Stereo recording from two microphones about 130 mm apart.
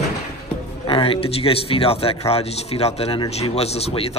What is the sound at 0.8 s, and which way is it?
Speech, 45° left (ahead or behind).